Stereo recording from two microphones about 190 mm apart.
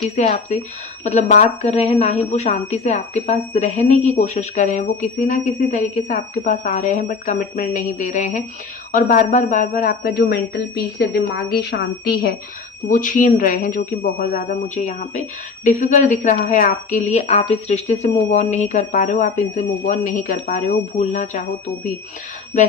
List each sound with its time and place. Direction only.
0.2 s speech: 35° left (ahead or behind)
22.5 s speech: 40° left (ahead or behind)